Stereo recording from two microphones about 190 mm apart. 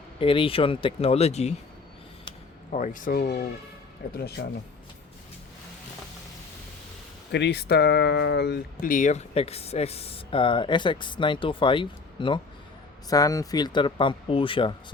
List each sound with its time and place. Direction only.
0.2 s speech: 30° left (ahead or behind)
2.7 s speech: 45° left (ahead or behind)
4.4 s speech: 65° left (ahead or behind)
7.3 s speech: 60° left (ahead or behind); by 14.7 s 25° left (ahead or behind)